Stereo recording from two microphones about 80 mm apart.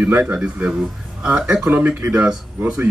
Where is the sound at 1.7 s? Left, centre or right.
Right.